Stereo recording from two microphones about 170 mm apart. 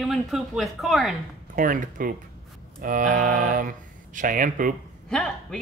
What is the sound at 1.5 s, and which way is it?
Speech, 50° right (ahead or behind).